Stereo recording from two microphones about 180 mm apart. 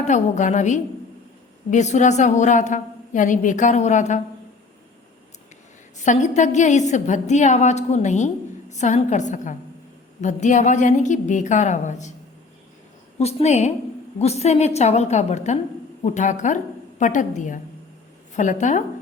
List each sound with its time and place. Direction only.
0.0 s a woman's voice: 40° left (ahead or behind)
6.0 s a woman's voice: 40° left (ahead or behind)
13.1 s a woman's voice: 40° left (ahead or behind)